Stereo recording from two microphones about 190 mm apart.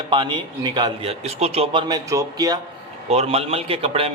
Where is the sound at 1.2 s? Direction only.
35° right (ahead or behind).